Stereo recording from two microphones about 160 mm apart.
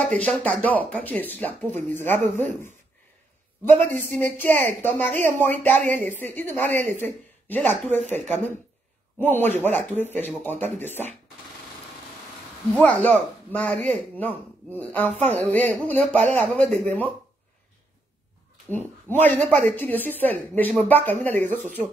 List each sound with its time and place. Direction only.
0.1 s speech: 5° left (ahead or behind)
3.8 s speech: 10° left (ahead or behind)
9.2 s speech: 15° left (ahead or behind)
12.7 s speech: 10° left (ahead or behind)
16.2 s speech: 45° right (ahead or behind)
16.5 s speech: 5° left (ahead or behind)
18.7 s speech: 10° left (ahead or behind)